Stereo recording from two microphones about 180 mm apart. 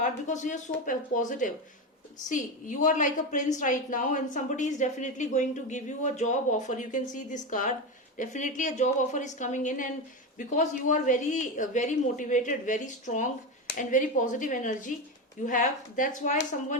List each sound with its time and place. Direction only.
0.0 s a woman's voice: 45° left (ahead or behind)